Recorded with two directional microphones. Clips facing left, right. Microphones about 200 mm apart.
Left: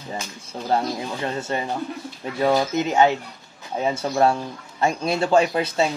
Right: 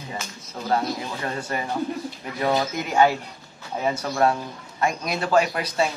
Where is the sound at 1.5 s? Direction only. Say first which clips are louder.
Even; 25° left (ahead or behind).